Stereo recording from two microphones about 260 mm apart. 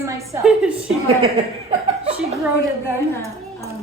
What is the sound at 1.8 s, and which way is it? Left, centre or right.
Chuckle, right.